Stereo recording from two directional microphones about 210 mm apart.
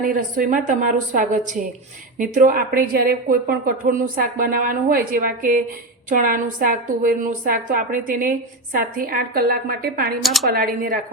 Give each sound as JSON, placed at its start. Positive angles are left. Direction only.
{"t": 0.0, "sound": "a woman's voice", "side_deg": -40}
{"t": 10.2, "sound": "a woman's voice", "side_deg": 0}
{"t": 10.5, "sound": "speech", "side_deg": -45}